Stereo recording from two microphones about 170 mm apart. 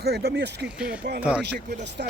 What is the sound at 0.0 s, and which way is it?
Speech, 70° right (ahead or behind).